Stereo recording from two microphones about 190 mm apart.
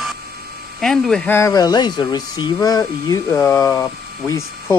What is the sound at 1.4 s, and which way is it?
Speech, 20° left (ahead or behind).